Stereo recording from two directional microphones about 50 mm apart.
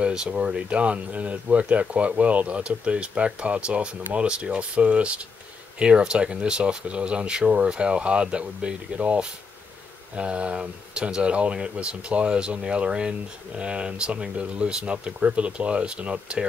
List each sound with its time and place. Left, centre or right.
0.0 s speech: centre